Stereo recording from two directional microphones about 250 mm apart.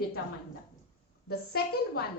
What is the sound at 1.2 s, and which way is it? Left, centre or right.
Speech, left.